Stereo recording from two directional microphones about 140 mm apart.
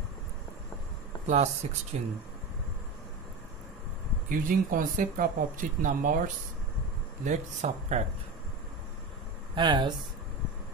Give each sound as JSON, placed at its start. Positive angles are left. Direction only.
{"t": 1.2, "sound": "speech", "side_deg": -55}
{"t": 4.3, "sound": "speech", "side_deg": -75}
{"t": 7.2, "sound": "speech", "side_deg": -60}
{"t": 9.6, "sound": "speech", "side_deg": -35}